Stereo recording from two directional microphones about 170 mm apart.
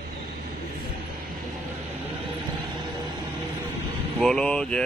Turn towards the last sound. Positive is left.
turn(degrees=5)  # may be behind; listen again after turning